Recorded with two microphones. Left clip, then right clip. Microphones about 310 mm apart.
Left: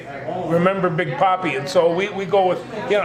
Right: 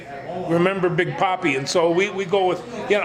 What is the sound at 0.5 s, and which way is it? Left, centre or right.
A man's voice, right.